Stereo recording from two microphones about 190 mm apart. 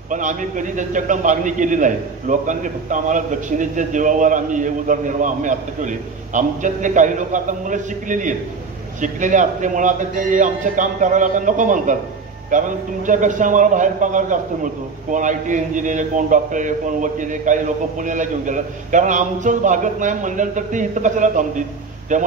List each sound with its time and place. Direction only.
0.1 s a man's voice: 40° right (ahead or behind)